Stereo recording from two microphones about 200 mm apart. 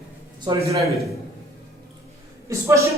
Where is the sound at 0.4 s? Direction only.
15° right (ahead or behind).